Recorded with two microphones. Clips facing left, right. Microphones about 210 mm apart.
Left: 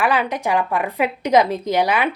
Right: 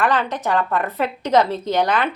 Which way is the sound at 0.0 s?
10° left (ahead or behind).